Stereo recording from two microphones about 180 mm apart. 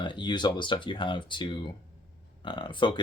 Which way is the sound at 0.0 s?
25° left (ahead or behind).